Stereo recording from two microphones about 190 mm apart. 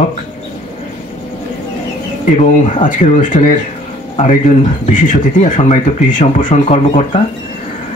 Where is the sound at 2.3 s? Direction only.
40° left (ahead or behind).